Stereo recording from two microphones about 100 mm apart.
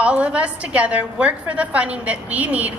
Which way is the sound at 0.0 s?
10° right (ahead or behind).